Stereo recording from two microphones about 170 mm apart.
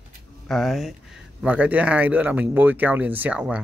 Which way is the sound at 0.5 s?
Centre (ahead or behind).